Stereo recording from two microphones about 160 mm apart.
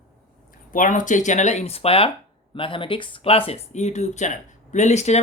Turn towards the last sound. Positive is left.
turn(degrees=45)  # may be behind; listen again after turning